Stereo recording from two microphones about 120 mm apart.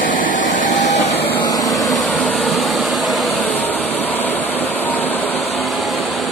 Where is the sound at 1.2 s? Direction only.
15° left (ahead or behind).